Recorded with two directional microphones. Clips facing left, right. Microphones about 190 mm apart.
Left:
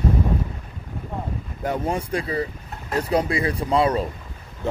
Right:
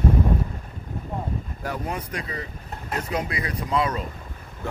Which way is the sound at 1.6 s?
25° left (ahead or behind).